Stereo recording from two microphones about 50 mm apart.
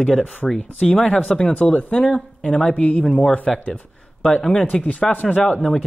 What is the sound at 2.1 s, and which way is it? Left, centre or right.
Speech, centre.